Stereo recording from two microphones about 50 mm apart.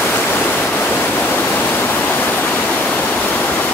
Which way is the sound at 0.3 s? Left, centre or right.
Left.